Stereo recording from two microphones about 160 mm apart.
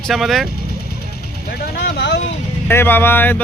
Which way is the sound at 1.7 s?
80° left.